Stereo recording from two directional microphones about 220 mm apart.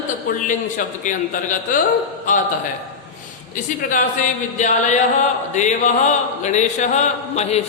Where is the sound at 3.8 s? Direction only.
35° left (ahead or behind).